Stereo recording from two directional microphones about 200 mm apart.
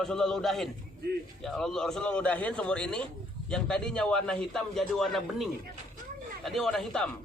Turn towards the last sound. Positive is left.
turn(degrees=0)  # may be behind; listen again after turning